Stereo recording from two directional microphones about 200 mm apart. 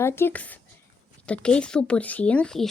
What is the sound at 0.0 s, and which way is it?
Speech, 10° left (ahead or behind).